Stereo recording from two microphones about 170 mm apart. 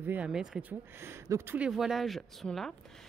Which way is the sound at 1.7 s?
Centre (ahead or behind).